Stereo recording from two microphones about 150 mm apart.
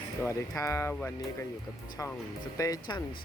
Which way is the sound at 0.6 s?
20° left (ahead or behind).